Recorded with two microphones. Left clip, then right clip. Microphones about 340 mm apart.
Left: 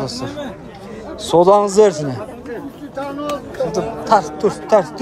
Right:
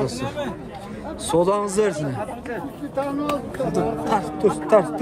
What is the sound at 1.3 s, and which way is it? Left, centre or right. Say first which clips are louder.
Speech: left 9 dB; centre.